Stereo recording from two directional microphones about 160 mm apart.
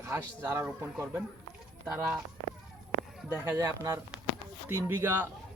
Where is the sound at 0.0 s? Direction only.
15° right (ahead or behind).